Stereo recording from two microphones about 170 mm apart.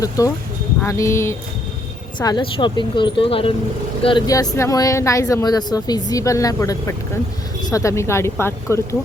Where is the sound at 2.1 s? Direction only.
25° left (ahead or behind).